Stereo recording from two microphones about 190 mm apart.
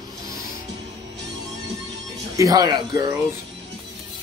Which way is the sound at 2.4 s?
20° right (ahead or behind).